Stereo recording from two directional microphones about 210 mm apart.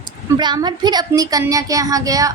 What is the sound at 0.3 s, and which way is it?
Speech, 20° right (ahead or behind).